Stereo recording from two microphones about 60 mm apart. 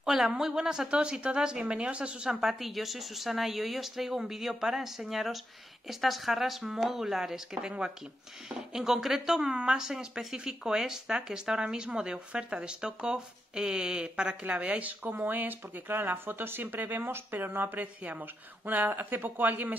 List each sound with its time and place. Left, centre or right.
0.0 s speech: centre; by 19.7 s right